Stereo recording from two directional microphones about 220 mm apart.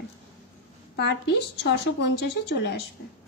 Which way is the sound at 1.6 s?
50° left (ahead or behind).